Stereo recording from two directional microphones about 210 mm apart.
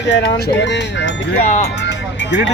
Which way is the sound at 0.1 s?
50° left (ahead or behind).